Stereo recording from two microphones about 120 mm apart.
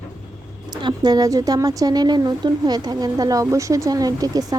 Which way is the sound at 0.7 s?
35° right (ahead or behind).